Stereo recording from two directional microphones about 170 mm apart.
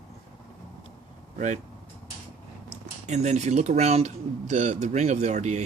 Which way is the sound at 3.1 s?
40° right (ahead or behind).